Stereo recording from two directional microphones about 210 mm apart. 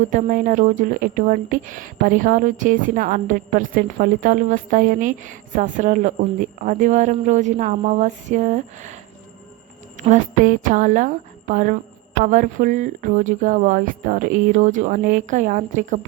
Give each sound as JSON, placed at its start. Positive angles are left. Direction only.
{"t": 0.0, "sound": "speech", "side_deg": -40}
{"t": 10.0, "sound": "speech", "side_deg": -35}